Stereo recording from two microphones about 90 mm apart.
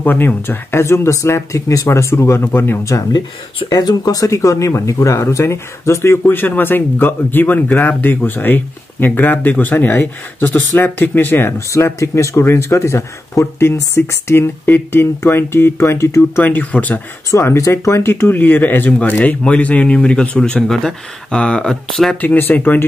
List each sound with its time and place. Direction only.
0.0 s speech: 20° left (ahead or behind)
3.6 s speech: 45° left (ahead or behind)
6.2 s speech: 20° left (ahead or behind)
17.3 s speech: 35° left (ahead or behind); by 22.2 s 5° left (ahead or behind)
22.2 s speech: 20° left (ahead or behind)